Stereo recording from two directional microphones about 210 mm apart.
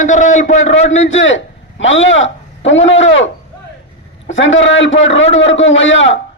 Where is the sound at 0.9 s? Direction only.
65° left (ahead or behind).